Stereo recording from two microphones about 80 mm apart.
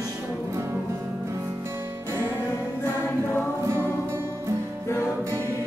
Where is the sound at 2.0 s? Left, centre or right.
Right.